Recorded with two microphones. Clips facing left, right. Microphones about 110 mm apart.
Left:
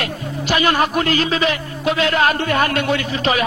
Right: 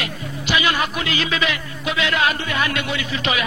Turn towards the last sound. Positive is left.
turn(degrees=45)  # may be behind; listen again after turning